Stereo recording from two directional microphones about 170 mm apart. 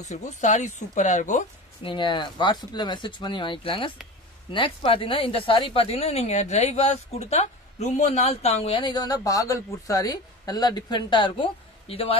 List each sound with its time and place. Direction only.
0.0 s speech: 45° left (ahead or behind)
1.8 s speech: 30° left (ahead or behind)